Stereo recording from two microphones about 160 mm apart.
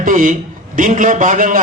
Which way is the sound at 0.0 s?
60° right (ahead or behind).